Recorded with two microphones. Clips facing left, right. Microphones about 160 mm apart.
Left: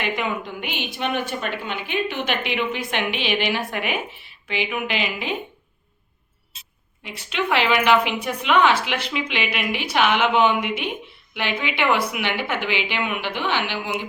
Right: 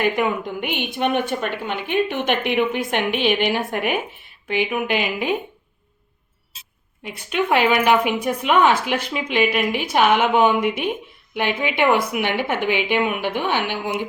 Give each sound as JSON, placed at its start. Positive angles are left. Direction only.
{"t": 0.0, "sound": "a woman's voice", "side_deg": -50}
{"t": 7.0, "sound": "a woman's voice", "side_deg": -45}